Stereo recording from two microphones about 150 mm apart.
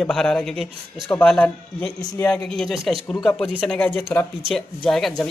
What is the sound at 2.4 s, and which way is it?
Speech, centre (ahead or behind).